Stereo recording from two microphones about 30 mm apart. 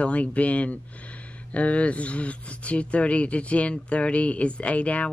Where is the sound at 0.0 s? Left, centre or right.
Left.